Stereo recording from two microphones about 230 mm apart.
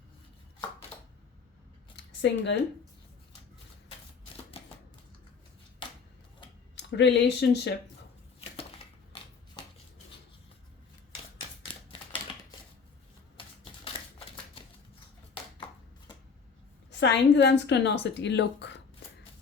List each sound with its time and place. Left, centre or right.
2.0 s a sound: left
4.6 s typewriter: left
6.7 s speech: left
16.9 s a woman's voice: left